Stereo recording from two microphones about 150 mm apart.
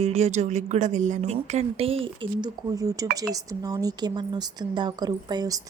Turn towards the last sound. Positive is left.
turn(degrees=-25)  # may be behind; listen again after turning